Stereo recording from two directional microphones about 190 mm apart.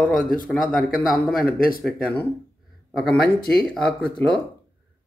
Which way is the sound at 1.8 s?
5° left (ahead or behind).